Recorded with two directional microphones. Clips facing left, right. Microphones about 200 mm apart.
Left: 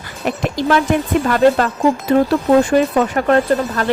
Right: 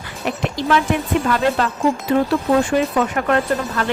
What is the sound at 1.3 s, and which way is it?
Speech, 50° left (ahead or behind).